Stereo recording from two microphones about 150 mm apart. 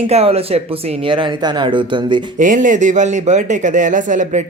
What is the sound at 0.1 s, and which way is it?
Speech, 40° right (ahead or behind).